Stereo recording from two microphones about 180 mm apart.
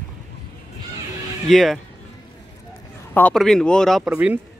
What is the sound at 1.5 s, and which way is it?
Speech, centre (ahead or behind).